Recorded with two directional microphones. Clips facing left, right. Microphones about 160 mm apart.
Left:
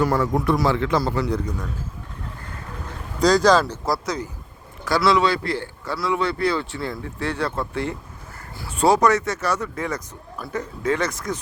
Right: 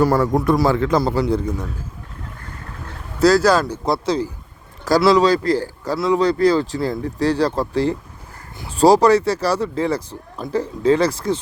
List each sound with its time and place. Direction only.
0.0 s speech: 40° right (ahead or behind)
1.0 s a man's voice: 30° right (ahead or behind)
3.2 s speech: 5° right (ahead or behind)
3.8 s a man's voice: 25° right (ahead or behind)